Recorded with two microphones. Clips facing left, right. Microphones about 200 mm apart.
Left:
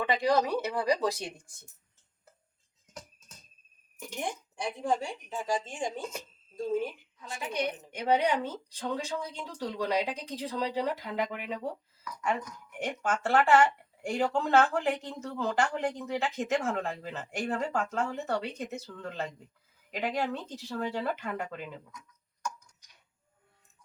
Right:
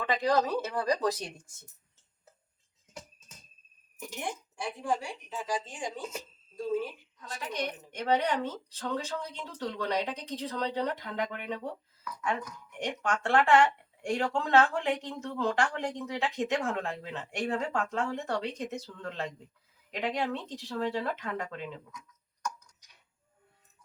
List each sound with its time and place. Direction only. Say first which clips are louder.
0.0 s speech: left 1 dB; 10° left (ahead or behind)
4.2 s speech: left 2 dB; 20° left (ahead or behind)
7.2 s speech: left 2 dB; 10° left (ahead or behind)
12.8 s speech: left 1 dB; 5° left (ahead or behind)